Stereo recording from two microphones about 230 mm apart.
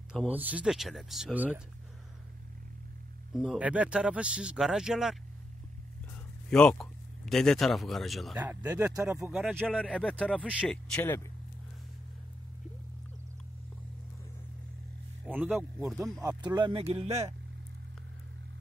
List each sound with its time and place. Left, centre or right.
0.1 s speech: centre
3.3 s speech: centre
6.5 s speech: centre
8.4 s speech: centre
15.3 s speech: centre
16.2 s speech: centre